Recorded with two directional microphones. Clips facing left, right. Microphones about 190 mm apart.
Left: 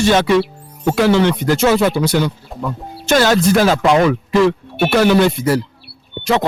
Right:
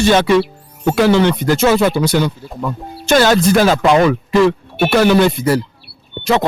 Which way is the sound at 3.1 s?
30° right (ahead or behind).